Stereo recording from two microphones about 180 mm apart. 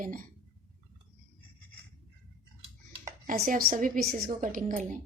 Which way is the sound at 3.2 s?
50° right (ahead or behind).